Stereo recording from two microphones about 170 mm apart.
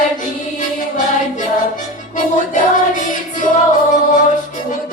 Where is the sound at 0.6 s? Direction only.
50° left (ahead or behind).